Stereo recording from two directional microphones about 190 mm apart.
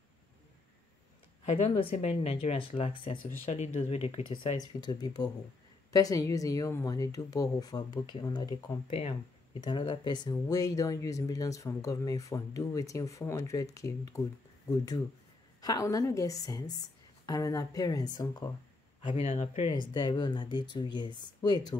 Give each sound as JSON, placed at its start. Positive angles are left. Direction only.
{"t": 1.4, "sound": "speech", "side_deg": 35}
{"t": 18.9, "sound": "speech", "side_deg": 30}
{"t": 19.7, "sound": "speech", "side_deg": 25}